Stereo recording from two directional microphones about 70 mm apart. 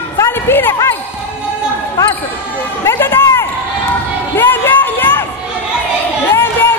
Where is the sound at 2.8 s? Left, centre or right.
Left.